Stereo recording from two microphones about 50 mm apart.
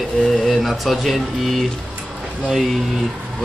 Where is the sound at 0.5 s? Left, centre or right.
Centre.